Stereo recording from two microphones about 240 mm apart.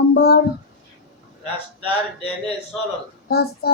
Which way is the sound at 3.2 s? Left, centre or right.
Left.